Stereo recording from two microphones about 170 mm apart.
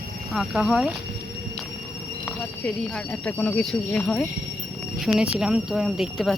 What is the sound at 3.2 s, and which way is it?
Speech, 5° left (ahead or behind).